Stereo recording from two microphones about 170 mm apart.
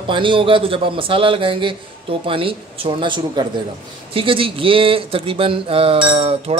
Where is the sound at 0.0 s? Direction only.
30° right (ahead or behind).